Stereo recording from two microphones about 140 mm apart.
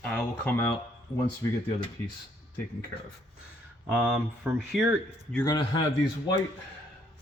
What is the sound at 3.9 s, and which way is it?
Speech, 10° right (ahead or behind).